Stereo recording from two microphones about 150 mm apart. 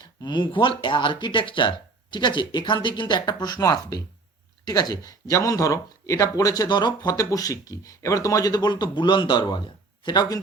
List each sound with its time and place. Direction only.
0.0 s speech: 30° left (ahead or behind)